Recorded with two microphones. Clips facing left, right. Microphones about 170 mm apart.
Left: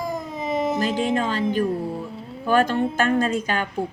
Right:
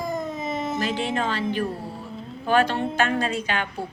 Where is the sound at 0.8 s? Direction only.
45° left (ahead or behind).